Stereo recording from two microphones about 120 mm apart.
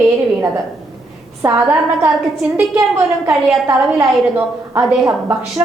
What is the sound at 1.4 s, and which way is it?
Speech, 20° right (ahead or behind).